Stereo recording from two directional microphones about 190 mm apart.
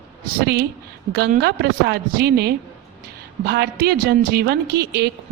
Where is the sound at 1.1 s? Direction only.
55° right (ahead or behind).